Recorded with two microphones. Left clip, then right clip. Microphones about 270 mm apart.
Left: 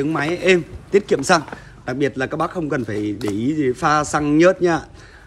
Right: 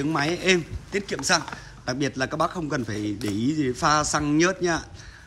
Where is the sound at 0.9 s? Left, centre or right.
Centre.